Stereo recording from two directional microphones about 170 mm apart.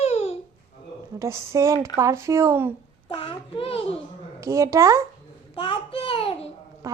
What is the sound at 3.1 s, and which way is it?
Speech, 30° left (ahead or behind).